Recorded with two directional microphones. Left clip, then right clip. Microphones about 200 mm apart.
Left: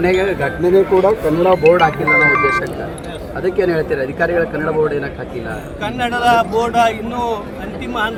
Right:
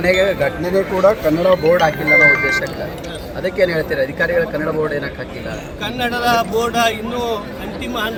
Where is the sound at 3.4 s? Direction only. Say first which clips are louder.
Left 1 dB; 35° left (ahead or behind).